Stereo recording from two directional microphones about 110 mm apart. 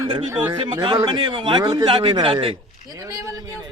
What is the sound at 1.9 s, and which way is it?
Speech, 45° right (ahead or behind).